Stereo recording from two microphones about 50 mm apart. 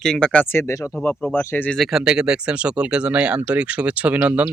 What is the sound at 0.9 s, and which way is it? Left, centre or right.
Speech, left.